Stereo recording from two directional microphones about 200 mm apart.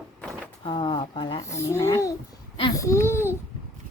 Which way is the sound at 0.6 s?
25° left (ahead or behind).